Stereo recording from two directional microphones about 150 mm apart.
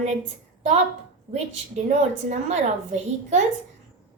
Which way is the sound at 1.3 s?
45° right (ahead or behind).